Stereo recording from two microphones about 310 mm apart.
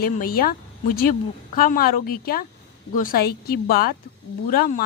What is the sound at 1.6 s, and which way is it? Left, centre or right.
A woman's voice, left.